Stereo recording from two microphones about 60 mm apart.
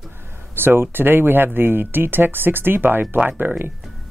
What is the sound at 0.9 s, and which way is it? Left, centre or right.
Speech, right.